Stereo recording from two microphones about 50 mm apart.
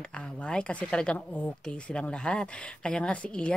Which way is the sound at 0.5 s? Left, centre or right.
Left.